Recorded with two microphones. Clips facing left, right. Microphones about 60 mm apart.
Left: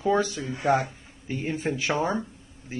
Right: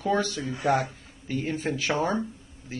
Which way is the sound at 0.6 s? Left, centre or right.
Left.